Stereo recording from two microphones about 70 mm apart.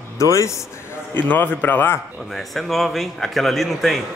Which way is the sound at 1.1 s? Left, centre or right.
Left.